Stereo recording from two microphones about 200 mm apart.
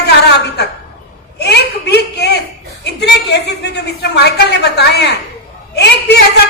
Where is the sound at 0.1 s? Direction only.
55° left (ahead or behind).